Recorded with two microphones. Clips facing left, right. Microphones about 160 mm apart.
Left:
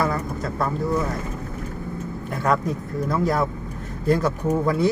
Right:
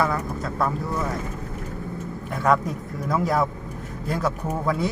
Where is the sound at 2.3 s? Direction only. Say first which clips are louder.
Right 1 dB; centre (ahead or behind).